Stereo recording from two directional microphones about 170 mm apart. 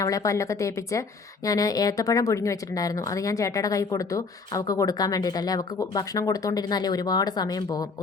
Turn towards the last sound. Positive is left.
turn(degrees=25)  # may be behind; listen again after turning